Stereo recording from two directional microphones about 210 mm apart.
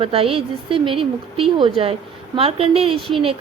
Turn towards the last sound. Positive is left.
turn(degrees=-25)  # may be behind; listen again after turning